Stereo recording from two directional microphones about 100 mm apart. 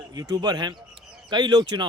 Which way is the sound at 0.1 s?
45° right (ahead or behind).